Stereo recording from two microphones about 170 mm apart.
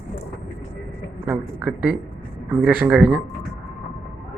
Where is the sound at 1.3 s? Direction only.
10° right (ahead or behind).